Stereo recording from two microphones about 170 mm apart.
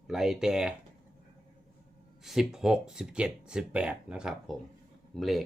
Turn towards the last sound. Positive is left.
turn(degrees=0)  # may be behind; listen again after turning